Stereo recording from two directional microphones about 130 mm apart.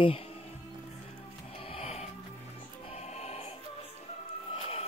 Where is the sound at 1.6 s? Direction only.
45° left (ahead or behind).